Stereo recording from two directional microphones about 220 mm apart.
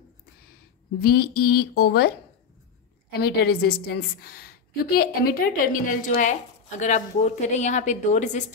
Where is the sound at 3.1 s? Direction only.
45° left (ahead or behind).